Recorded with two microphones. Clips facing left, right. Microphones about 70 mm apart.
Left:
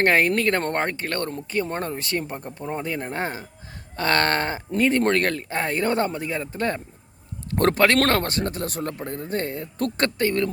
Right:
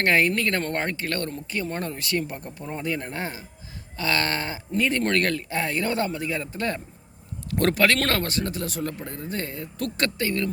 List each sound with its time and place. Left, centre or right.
0.0 s speech: left
3.9 s speech: left
4.9 s speech: left